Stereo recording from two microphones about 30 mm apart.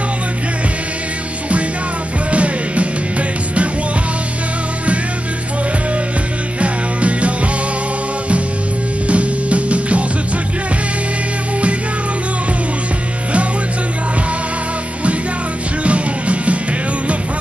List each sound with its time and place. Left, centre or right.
2.3 s music: right
6.6 s music: right
9.0 s music: right
15.8 s music: right